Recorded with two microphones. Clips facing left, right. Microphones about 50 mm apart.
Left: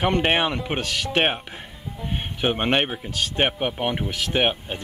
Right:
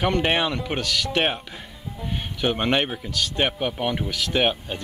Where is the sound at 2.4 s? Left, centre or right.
Centre.